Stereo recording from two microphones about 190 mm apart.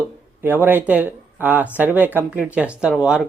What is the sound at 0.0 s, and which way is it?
Speech, 10° right (ahead or behind).